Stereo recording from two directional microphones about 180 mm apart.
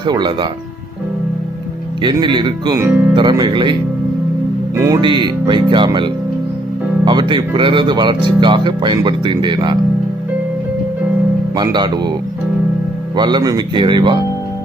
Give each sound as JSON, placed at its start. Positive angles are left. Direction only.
{"t": 0.0, "sound": "speech", "side_deg": -25}
{"t": 2.0, "sound": "speech", "side_deg": -25}
{"t": 2.8, "sound": "speech", "side_deg": -10}
{"t": 3.2, "sound": "speech", "side_deg": -25}
{"t": 4.7, "sound": "speech", "side_deg": -20}
{"t": 7.1, "sound": "speech", "side_deg": -25}
{"t": 11.5, "sound": "speech", "side_deg": -25}
{"t": 13.1, "sound": "speech", "side_deg": -25}